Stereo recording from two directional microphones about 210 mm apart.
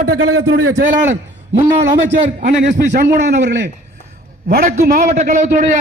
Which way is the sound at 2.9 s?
45° right (ahead or behind).